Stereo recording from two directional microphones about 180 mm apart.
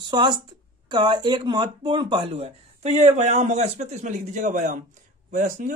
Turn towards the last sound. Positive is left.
turn(degrees=-45)  # may be behind; listen again after turning